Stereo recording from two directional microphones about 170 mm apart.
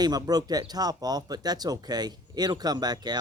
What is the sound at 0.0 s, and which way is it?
Speech, 25° right (ahead or behind).